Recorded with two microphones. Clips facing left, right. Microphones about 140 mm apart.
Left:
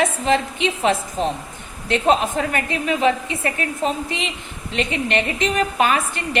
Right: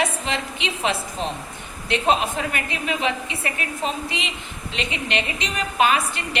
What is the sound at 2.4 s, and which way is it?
A woman's voice, 40° left (ahead or behind).